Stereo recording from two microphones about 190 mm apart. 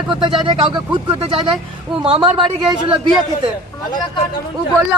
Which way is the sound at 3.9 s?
25° left (ahead or behind).